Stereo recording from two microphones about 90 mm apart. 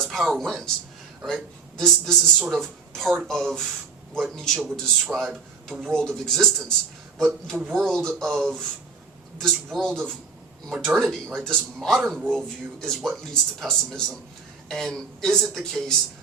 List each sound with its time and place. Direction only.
0.0 s speech: 5° left (ahead or behind)
4.5 s speech: 15° right (ahead or behind)
5.1 s speech: centre (ahead or behind)
5.9 s speech: 5° left (ahead or behind)
9.7 s speech: 5° left (ahead or behind)